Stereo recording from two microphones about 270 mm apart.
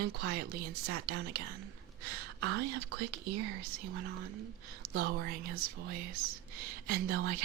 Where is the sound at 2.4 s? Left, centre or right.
Right.